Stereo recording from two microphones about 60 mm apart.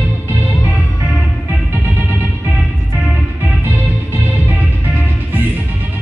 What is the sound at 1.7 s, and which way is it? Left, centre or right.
Music, right.